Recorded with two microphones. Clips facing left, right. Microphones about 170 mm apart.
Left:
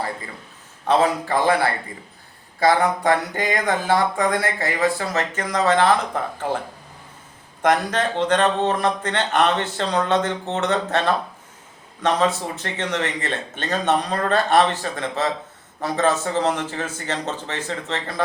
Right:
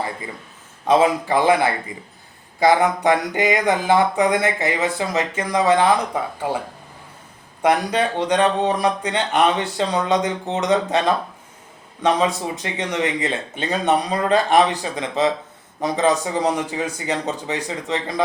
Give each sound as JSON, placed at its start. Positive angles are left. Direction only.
{"t": 0.9, "sound": "speech", "side_deg": -15}
{"t": 7.6, "sound": "speech", "side_deg": -10}